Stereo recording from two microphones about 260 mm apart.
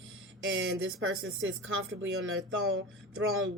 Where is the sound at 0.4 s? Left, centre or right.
Right.